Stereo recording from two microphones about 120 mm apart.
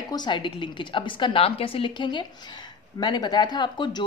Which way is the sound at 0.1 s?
40° left (ahead or behind).